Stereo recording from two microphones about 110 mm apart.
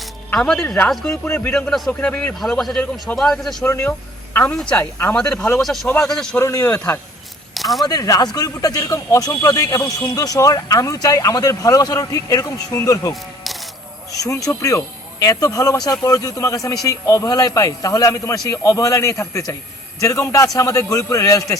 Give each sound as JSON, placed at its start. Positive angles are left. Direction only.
{"t": 0.3, "sound": "speech", "side_deg": 5}
{"t": 1.5, "sound": "speech", "side_deg": 5}
{"t": 2.4, "sound": "speech", "side_deg": 0}
{"t": 3.7, "sound": "a man's voice", "side_deg": 25}
{"t": 4.4, "sound": "speech", "side_deg": 15}
{"t": 6.4, "sound": "a man's voice", "side_deg": 30}
{"t": 7.5, "sound": "a sound", "side_deg": 0}
{"t": 7.9, "sound": "speech", "side_deg": 35}